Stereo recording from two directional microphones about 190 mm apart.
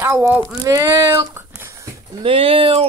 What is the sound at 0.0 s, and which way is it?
Speech, 10° right (ahead or behind).